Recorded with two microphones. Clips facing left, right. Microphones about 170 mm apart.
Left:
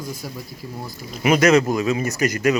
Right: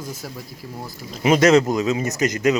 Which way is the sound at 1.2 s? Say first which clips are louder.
Right 1 dB; 25° right (ahead or behind).